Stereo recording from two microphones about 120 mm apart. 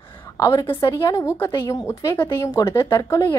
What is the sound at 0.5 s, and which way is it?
Speech, 45° left (ahead or behind).